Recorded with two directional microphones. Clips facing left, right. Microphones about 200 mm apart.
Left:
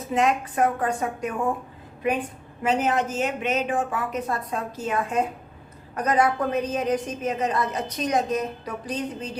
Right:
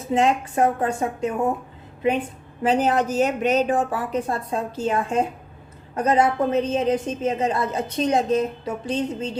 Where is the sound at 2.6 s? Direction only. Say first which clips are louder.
Right 3 dB; 35° right (ahead or behind).